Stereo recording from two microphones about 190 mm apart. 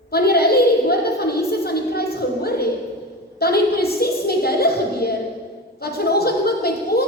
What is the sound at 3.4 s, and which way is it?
A woman's voice, 55° left (ahead or behind).